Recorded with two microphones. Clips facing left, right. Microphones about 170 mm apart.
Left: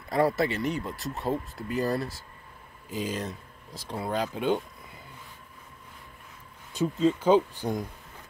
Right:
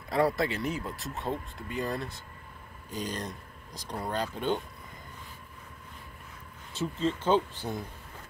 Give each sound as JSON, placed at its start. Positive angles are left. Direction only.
{"t": 0.1, "sound": "speech", "side_deg": 0}
{"t": 6.7, "sound": "speech", "side_deg": 15}